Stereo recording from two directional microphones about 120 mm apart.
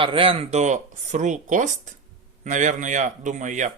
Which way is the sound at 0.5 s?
80° right.